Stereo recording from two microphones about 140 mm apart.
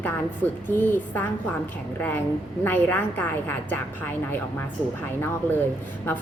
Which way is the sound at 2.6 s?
15° left (ahead or behind).